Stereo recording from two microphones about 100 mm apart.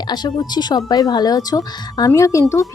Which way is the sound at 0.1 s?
45° left (ahead or behind).